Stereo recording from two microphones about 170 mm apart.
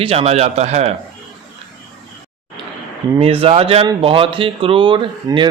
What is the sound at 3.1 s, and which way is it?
Speech, 35° right (ahead or behind).